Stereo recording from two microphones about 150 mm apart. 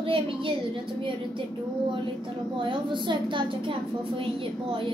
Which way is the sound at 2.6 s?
30° right (ahead or behind).